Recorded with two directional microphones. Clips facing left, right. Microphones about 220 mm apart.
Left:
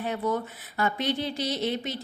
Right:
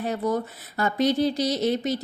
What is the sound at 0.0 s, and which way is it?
A woman's voice, 40° right (ahead or behind).